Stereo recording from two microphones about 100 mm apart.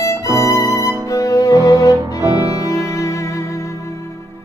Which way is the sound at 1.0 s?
35° left (ahead or behind).